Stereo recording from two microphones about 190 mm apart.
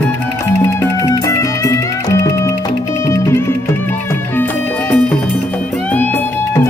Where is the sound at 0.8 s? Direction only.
15° left (ahead or behind).